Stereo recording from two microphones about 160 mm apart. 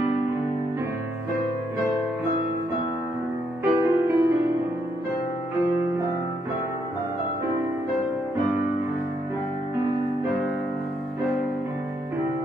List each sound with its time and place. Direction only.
3.6 s music: 15° right (ahead or behind)